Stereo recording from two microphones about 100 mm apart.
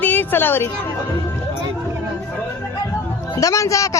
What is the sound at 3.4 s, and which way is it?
Speech, 35° left (ahead or behind).